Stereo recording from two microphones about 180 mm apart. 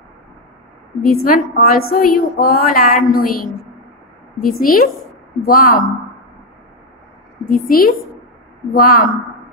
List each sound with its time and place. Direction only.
1.0 s a woman's voice: 55° left (ahead or behind)
7.4 s a woman's voice: 50° left (ahead or behind)